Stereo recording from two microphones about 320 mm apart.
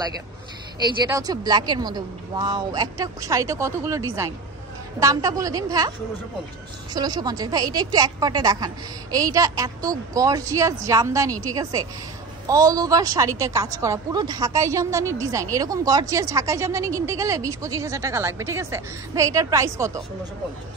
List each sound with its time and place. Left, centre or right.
1.0 s a woman's voice: centre